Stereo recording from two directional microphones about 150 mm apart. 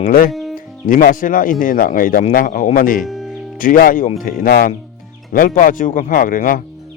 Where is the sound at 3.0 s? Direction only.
Centre (ahead or behind).